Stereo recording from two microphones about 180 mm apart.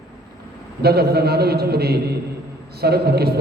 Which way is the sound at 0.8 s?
60° right (ahead or behind).